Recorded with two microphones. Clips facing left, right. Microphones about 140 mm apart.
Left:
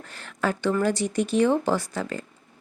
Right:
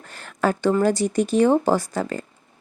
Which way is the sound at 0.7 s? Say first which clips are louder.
Right 4 dB; 40° right (ahead or behind).